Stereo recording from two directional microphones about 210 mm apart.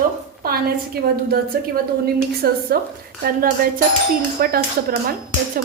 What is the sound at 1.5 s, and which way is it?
A woman's voice, 45° right (ahead or behind).